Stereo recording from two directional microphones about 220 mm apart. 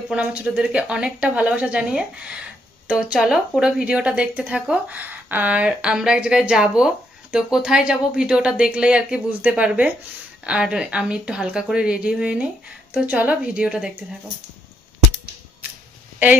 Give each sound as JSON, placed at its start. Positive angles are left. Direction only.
{"t": 0.1, "sound": "a woman's voice", "side_deg": -5}